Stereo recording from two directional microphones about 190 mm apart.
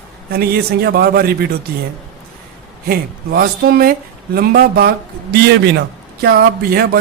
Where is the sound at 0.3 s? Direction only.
55° right (ahead or behind).